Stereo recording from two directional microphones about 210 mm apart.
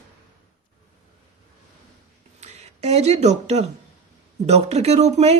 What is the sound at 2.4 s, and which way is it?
Speech, 30° right (ahead or behind).